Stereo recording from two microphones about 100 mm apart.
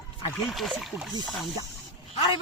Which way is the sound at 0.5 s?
Centre (ahead or behind).